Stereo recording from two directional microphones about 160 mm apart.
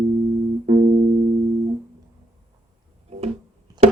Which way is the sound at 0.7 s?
45° right (ahead or behind).